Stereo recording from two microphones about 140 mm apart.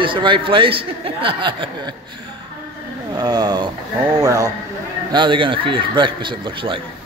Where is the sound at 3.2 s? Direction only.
30° right (ahead or behind).